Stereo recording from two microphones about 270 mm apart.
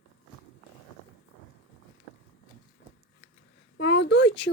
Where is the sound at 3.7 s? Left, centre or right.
Left.